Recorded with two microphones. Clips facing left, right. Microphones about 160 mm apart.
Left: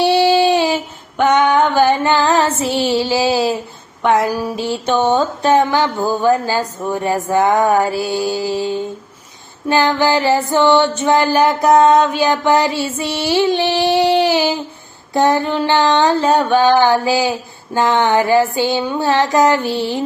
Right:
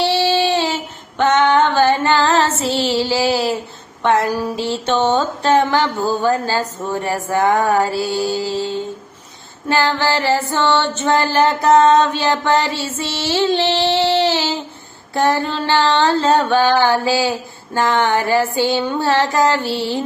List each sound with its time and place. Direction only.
0.0 s female singing: 15° left (ahead or behind)
4.0 s music: 15° left (ahead or behind)